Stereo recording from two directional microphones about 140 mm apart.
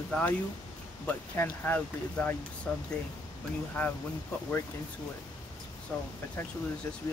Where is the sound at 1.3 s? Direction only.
15° left (ahead or behind).